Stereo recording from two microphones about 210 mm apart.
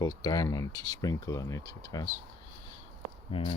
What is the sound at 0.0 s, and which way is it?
Speech, 15° left (ahead or behind).